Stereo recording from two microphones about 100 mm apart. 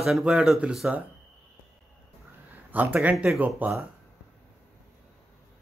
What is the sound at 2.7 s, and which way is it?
A man's voice, 15° right (ahead or behind).